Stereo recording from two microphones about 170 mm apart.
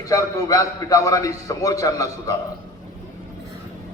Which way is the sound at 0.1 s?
20° left (ahead or behind).